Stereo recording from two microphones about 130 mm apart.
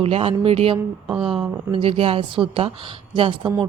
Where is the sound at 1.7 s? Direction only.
45° right (ahead or behind).